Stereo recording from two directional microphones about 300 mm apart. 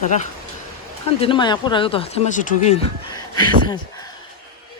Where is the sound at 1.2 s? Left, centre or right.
Centre.